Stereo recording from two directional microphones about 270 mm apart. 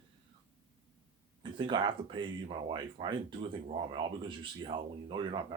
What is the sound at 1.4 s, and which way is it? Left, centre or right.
Speech, centre.